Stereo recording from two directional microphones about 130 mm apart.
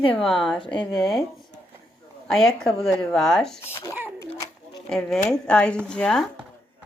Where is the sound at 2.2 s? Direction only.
Centre (ahead or behind).